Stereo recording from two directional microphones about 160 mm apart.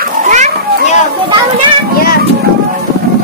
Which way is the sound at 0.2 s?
50° right (ahead or behind).